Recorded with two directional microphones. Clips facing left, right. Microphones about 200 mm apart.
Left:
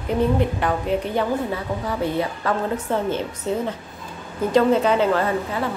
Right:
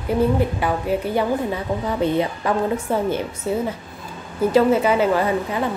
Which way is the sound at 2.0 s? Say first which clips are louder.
Right 4 dB; 15° right (ahead or behind).